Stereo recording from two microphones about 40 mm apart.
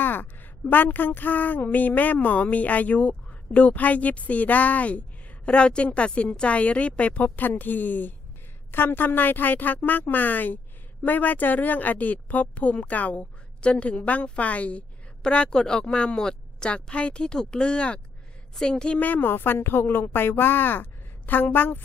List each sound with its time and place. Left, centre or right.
0.0 s a sound: left
0.7 s speech: left
7.6 s a woman's voice: left
18.9 s a woman's voice: left